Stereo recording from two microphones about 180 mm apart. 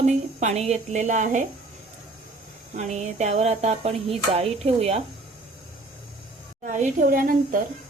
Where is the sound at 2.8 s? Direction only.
40° right (ahead or behind).